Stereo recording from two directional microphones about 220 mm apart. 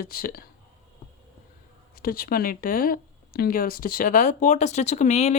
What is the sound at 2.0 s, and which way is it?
Speech, 40° left (ahead or behind).